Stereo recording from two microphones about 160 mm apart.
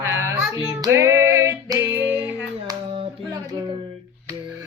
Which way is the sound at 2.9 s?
35° right (ahead or behind).